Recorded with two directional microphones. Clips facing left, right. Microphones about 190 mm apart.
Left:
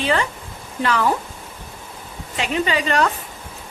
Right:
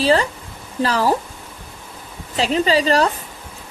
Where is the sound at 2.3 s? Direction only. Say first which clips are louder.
Right 4 dB; 35° right (ahead or behind).